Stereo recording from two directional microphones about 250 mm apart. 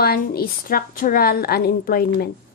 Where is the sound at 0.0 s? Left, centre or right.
Left.